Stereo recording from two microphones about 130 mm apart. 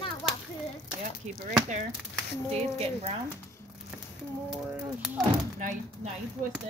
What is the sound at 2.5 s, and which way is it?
Speech, 50° right (ahead or behind).